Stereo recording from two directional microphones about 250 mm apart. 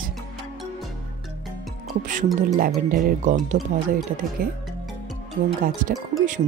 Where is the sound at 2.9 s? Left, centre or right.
Right.